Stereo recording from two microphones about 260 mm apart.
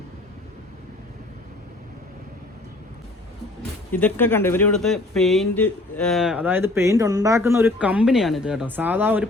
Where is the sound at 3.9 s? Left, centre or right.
Centre.